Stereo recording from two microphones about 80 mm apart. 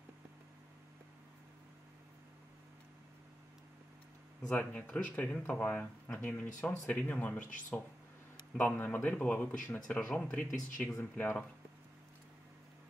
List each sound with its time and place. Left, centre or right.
4.4 s speech: centre